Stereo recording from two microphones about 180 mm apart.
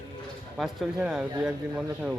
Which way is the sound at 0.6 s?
Centre (ahead or behind).